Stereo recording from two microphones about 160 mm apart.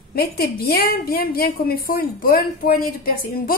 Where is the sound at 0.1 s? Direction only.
70° left (ahead or behind).